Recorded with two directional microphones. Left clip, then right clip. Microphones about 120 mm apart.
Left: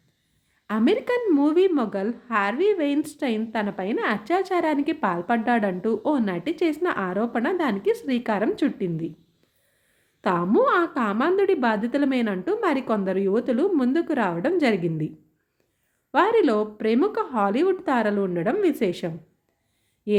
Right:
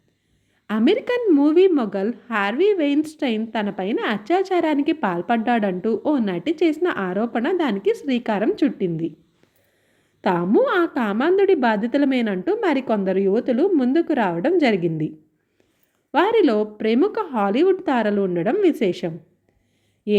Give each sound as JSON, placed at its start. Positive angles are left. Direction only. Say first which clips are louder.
{"t": 0.7, "sound": "a woman's voice", "louder": "right 3 dB", "side_deg": -20}
{"t": 10.2, "sound": "a woman's voice", "louder": "right 2 dB", "side_deg": -15}
{"t": 16.1, "sound": "a woman's voice", "louder": "right 2 dB", "side_deg": -20}
{"t": 20.1, "sound": "a sound", "louder": "right 2 dB", "side_deg": -15}